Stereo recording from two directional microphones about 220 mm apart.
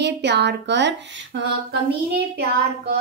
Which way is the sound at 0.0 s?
50° right (ahead or behind).